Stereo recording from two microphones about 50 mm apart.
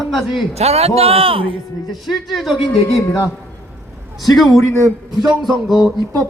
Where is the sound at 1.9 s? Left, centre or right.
Centre.